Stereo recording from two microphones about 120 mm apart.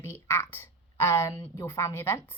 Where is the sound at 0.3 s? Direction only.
20° left (ahead or behind).